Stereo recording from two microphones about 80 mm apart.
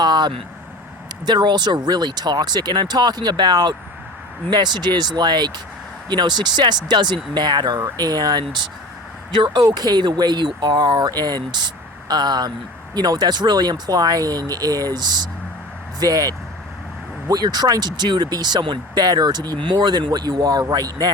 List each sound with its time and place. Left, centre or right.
0.0 s vehicle: right
1.2 s speech: right